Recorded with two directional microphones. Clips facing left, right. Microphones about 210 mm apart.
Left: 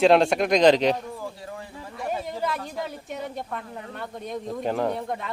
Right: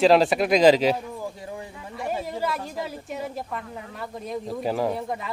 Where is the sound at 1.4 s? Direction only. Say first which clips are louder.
Right 2 dB; 20° right (ahead or behind).